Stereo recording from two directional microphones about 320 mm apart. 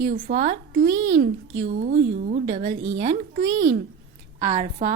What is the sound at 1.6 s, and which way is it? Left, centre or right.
A woman's voice, right.